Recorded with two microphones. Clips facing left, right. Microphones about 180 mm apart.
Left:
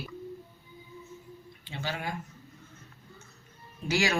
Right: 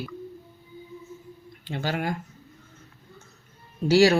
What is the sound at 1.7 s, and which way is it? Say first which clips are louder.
Speech: right 7 dB; 45° right (ahead or behind).